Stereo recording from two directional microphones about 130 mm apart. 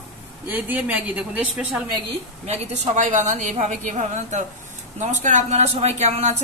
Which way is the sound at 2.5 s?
65° right (ahead or behind).